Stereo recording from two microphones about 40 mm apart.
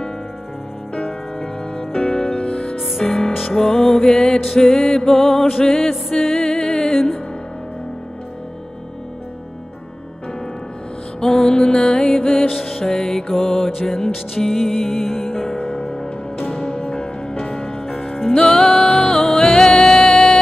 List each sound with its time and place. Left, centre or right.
0.9 s music: centre
3.0 s music: centre
6.1 s music: centre
11.1 s music: centre
12.8 s music: centre